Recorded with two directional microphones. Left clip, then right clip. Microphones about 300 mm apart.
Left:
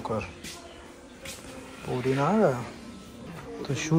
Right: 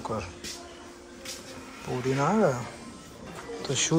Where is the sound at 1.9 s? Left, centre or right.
Centre.